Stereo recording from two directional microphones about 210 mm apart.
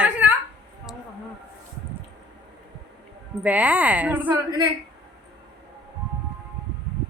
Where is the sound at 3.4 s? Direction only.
5° right (ahead or behind).